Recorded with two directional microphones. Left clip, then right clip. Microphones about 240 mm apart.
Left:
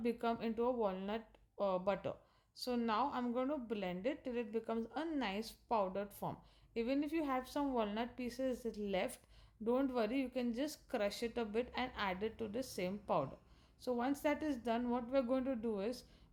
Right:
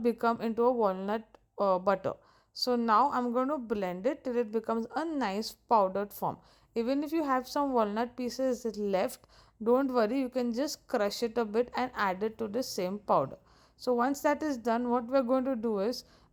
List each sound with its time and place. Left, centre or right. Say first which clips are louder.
0.0 s a woman's voice: right 10 dB; right